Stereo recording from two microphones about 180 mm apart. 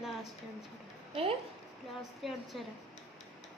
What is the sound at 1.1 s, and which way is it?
Speech, 35° right (ahead or behind).